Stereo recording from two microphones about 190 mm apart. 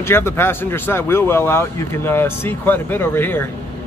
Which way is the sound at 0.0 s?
10° left (ahead or behind).